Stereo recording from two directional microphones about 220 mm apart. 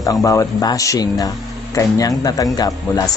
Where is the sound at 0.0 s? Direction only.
15° left (ahead or behind).